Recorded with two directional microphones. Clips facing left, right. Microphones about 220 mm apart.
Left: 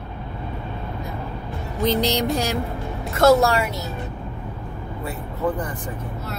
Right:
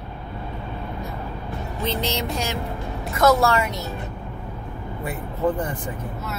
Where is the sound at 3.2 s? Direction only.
30° left (ahead or behind).